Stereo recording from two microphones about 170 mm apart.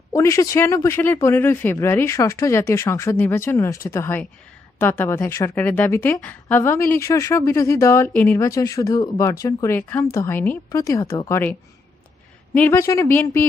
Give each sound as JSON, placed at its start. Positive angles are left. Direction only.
{"t": 0.1, "sound": "a man's voice", "side_deg": 20}
{"t": 12.5, "sound": "a man's voice", "side_deg": 15}